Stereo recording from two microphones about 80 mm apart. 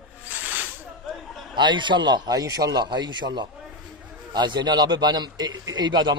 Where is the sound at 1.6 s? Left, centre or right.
Right.